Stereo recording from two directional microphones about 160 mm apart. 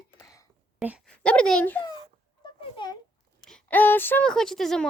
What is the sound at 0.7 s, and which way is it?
Speech, 5° right (ahead or behind).